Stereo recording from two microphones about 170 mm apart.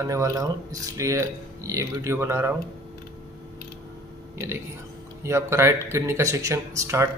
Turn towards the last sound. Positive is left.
turn(degrees=-15)  # may be behind; listen again after turning